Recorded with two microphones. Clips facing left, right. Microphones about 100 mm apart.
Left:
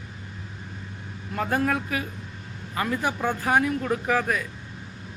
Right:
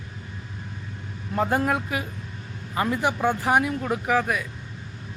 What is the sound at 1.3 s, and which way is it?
A man's voice, 20° right (ahead or behind).